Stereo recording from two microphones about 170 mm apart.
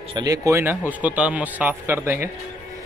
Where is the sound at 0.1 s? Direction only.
20° right (ahead or behind).